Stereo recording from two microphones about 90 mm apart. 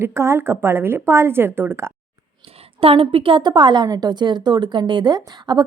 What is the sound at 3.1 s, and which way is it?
A woman's voice, 70° right (ahead or behind).